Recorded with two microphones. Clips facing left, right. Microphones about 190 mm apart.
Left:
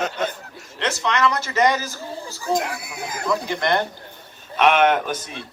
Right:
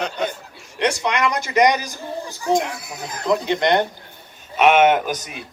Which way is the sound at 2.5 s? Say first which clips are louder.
Right 3 dB; 5° left (ahead or behind).